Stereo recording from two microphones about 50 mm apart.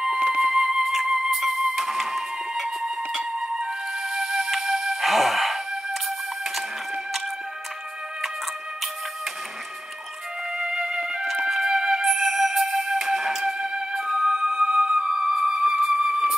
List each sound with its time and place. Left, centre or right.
0.0 s music: centre
10.6 s music: centre